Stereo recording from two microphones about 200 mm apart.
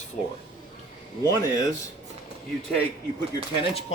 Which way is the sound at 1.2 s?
15° left (ahead or behind).